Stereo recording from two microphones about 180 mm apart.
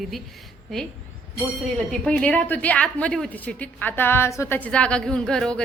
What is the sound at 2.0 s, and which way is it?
A woman's voice, 5° left (ahead or behind).